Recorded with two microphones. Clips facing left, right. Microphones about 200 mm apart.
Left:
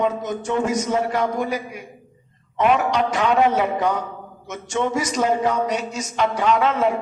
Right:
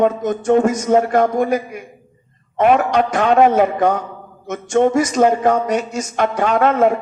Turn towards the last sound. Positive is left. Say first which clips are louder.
# right 4 dB
turn(degrees=-50)  # may be behind; listen again after turning